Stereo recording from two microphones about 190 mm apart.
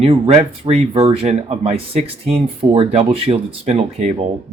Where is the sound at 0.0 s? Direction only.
30° right (ahead or behind).